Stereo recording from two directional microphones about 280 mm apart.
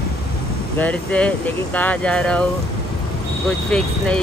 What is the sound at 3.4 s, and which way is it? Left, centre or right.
Speech, centre.